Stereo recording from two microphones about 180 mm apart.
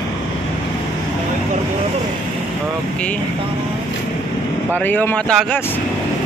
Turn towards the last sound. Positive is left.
turn(degrees=5)  # may be behind; listen again after turning